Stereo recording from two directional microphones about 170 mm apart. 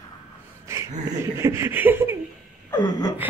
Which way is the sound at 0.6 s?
15° right (ahead or behind).